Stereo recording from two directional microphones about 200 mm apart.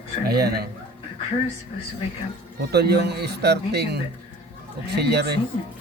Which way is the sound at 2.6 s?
55° right (ahead or behind).